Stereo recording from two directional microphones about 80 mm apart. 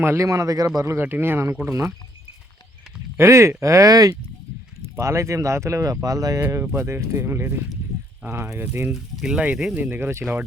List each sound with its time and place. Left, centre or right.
0.0 s speech: right
0.3 s speech: right
0.9 s speech: right
3.2 s speech: right
4.9 s speech: right
6.7 s speech: right
8.9 s speech: centre
9.7 s speech: right